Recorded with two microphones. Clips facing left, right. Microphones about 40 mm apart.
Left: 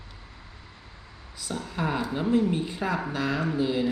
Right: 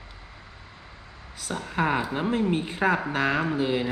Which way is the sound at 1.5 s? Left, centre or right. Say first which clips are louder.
Right 4 dB; right.